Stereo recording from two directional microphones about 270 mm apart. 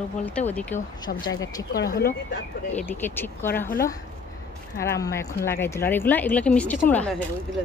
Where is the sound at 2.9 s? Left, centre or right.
Centre.